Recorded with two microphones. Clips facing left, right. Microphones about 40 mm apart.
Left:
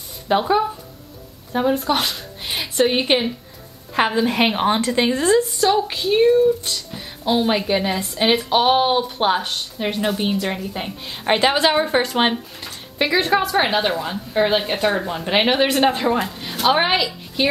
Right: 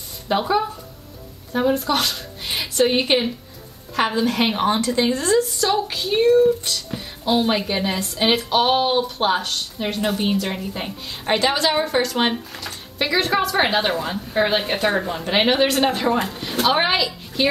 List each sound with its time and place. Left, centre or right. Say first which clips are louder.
0.3 s speech: left 2 dB; centre
2.4 s a sound: even; centre
3.1 s a woman's voice: left 1 dB; centre
5.6 s a woman's voice: left 3 dB; centre
8.4 s speech: left 2 dB; centre
10.0 s speech: right 1 dB; centre
11.1 s a woman's voice: left 2 dB; left
13.0 s speech: left 2 dB; centre
14.0 s a woman's voice: left 1 dB; centre